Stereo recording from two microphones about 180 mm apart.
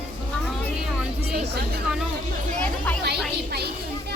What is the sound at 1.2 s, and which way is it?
Speech, 60° right (ahead or behind).